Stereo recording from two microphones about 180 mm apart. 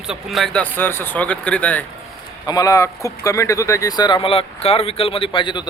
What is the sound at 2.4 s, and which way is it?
A man's voice, 20° left (ahead or behind).